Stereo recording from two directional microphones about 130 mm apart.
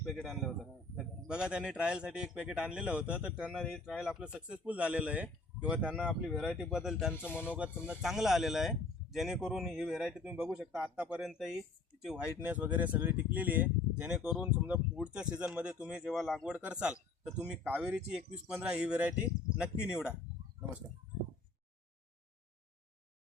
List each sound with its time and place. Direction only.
0.0 s a man's voice: 5° left (ahead or behind)
7.3 s speech: 15° left (ahead or behind)
7.5 s a man's voice: 10° right (ahead or behind)